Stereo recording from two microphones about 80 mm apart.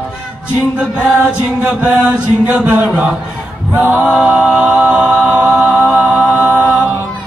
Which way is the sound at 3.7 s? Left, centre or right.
Right.